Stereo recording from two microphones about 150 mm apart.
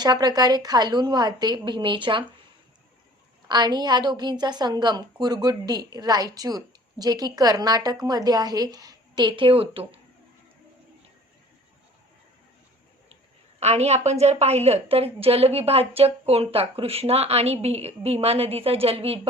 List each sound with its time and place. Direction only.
0.0 s a woman's voice: 25° right (ahead or behind)
3.5 s a woman's voice: 30° right (ahead or behind)
13.6 s a woman's voice: 45° right (ahead or behind)